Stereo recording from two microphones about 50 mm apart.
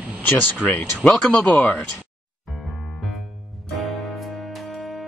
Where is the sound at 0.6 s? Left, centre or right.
Left.